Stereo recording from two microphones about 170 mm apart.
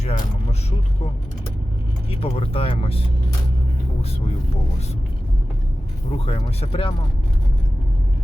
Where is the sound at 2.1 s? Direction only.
35° left (ahead or behind).